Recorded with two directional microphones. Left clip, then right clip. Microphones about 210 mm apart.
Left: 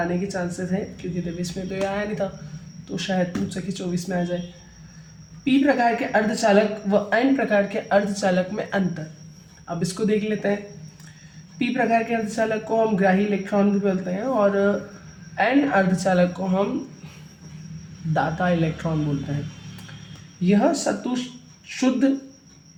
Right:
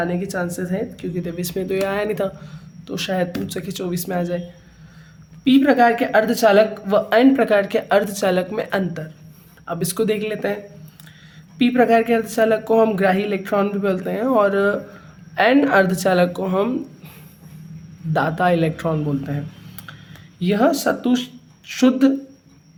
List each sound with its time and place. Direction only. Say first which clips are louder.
0.3 s a woman's voice: right 3 dB; 45° right (ahead or behind)
5.5 s a woman's voice: right 5 dB; 55° right (ahead or behind)
11.6 s a woman's voice: right 6 dB; 50° right (ahead or behind)
18.1 s a woman's voice: right 5 dB; 45° right (ahead or behind)
20.4 s a woman's voice: right 3 dB; 55° right (ahead or behind)